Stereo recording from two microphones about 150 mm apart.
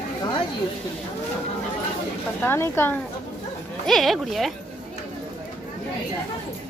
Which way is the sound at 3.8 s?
Centre (ahead or behind).